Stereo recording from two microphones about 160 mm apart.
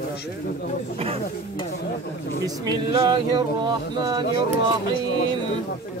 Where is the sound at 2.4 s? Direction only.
25° right (ahead or behind).